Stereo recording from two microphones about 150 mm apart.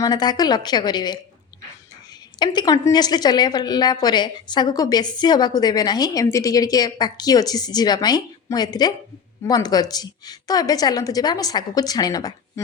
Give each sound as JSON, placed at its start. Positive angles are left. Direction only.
{"t": 0.0, "sound": "a woman's voice", "side_deg": 25}
{"t": 2.4, "sound": "a woman's voice", "side_deg": 30}